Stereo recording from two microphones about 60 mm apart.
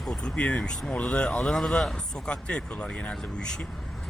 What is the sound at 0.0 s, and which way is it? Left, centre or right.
Speech, centre.